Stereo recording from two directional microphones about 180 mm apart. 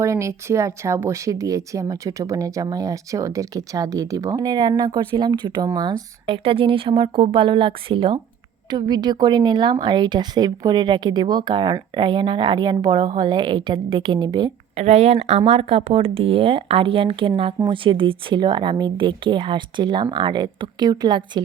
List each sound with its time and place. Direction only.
0.0 s speech: 15° right (ahead or behind)
14.8 s speech: 35° right (ahead or behind)